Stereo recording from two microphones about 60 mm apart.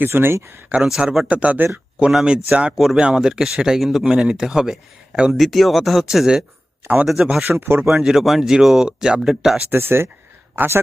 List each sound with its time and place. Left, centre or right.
0.0 s speech: right
0.8 s speech: centre
1.3 s speech: right
2.2 s a man's voice: centre
2.7 s speech: centre
3.0 s a man's voice: centre
5.3 s speech: centre
6.8 s speech: right
7.6 s speech: right
7.9 s a man's voice: centre
9.6 s speech: right